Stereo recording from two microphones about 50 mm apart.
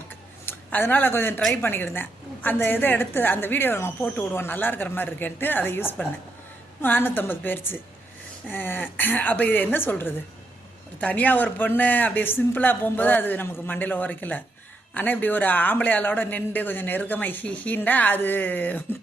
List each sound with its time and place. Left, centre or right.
0.4 s a woman's voice: left
11.0 s a man's voice: left